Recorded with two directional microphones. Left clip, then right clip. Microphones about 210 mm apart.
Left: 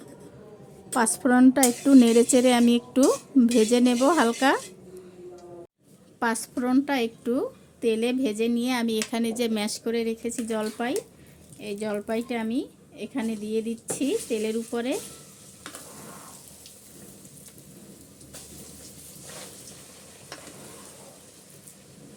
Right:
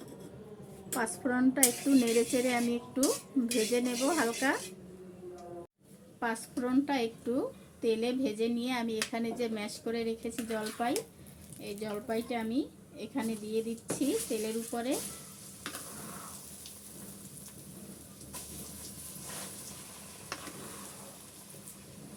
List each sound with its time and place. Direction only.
0.9 s a woman's voice: 55° left (ahead or behind)
6.1 s a woman's voice: 60° left (ahead or behind)